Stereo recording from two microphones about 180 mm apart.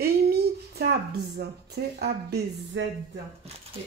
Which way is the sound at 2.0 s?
65° right (ahead or behind).